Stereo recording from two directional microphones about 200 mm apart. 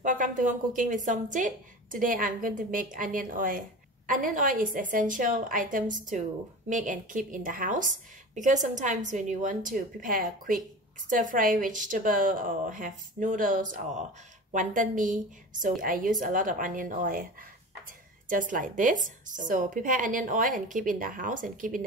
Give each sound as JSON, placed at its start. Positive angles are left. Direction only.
{"t": 0.0, "sound": "a woman's voice", "side_deg": -40}